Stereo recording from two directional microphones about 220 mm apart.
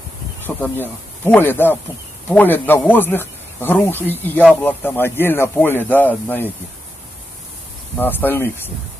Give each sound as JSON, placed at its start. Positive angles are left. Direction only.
{"t": 0.6, "sound": "a man's voice", "side_deg": 10}
{"t": 8.0, "sound": "a man's voice", "side_deg": 10}